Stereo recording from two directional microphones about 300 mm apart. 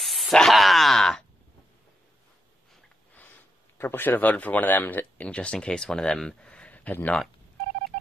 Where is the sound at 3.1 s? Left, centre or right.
Centre.